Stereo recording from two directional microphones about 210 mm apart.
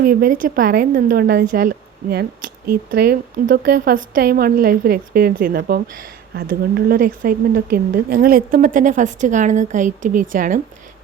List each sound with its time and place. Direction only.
0.0 s a woman's voice: 40° right (ahead or behind)